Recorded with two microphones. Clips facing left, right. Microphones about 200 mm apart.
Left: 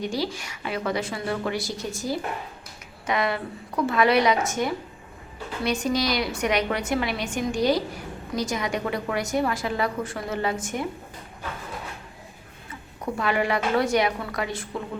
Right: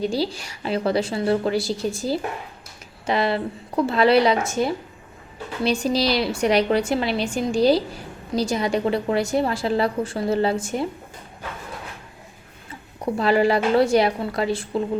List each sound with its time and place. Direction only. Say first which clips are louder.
0.0 s a woman's voice: right 4 dB; 30° right (ahead or behind)
13.1 s a woman's voice: right 6 dB; 30° right (ahead or behind)